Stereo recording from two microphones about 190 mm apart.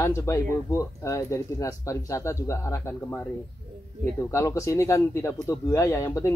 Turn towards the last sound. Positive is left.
turn(degrees=15)  # may be behind; listen again after turning